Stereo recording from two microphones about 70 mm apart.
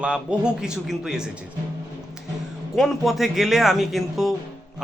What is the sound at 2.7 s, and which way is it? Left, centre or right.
Speech, centre.